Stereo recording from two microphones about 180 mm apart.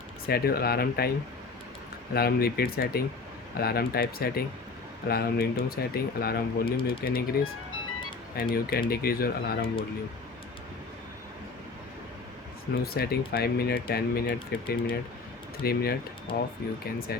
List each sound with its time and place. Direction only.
0.3 s speech: 60° left (ahead or behind)
2.1 s speech: 60° left (ahead or behind)
8.4 s speech: 55° left (ahead or behind)
12.8 s speech: 60° left (ahead or behind)